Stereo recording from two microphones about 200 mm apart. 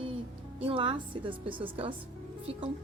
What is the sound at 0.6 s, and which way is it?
A woman's voice, 25° right (ahead or behind).